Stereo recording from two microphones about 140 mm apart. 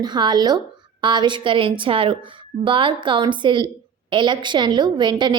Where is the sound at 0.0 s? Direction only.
30° right (ahead or behind).